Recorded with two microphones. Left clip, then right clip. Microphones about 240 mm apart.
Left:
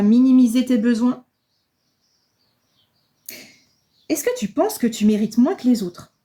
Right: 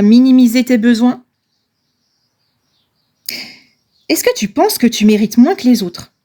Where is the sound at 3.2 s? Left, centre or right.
Right.